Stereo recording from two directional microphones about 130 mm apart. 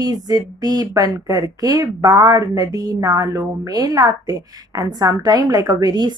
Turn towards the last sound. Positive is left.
turn(degrees=-30)  # may be behind; listen again after turning